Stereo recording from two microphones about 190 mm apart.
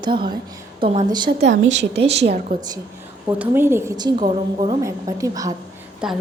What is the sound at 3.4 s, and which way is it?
A woman's voice, 10° right (ahead or behind).